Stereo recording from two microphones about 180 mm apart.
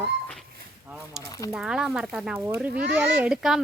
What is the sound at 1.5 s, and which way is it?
Speech, 5° right (ahead or behind).